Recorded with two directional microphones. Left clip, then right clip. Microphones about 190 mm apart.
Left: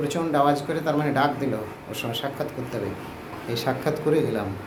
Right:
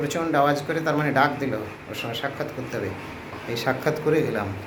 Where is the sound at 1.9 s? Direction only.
20° left (ahead or behind).